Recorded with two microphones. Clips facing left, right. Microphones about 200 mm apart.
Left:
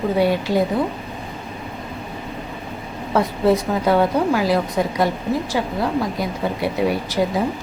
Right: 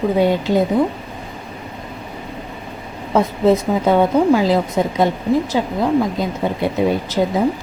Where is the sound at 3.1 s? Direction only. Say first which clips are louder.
Right 3 dB; 20° right (ahead or behind).